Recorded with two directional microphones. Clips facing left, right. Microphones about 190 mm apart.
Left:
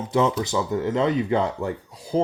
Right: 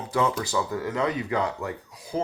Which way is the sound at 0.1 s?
25° left (ahead or behind).